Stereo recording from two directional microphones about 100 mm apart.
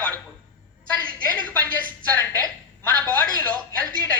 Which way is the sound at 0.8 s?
15° left (ahead or behind).